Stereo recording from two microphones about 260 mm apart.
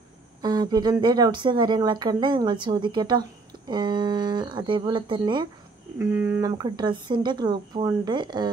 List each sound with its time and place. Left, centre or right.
0.4 s speech: centre